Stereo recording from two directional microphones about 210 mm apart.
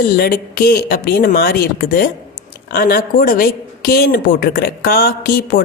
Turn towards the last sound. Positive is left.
turn(degrees=45)  # may be behind; listen again after turning